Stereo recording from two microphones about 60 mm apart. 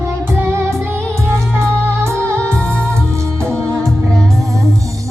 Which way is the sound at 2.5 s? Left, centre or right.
Right.